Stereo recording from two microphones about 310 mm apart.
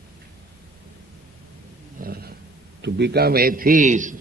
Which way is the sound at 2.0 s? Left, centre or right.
Right.